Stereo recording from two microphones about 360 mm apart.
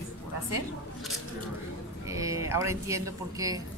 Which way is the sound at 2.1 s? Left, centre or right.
Centre.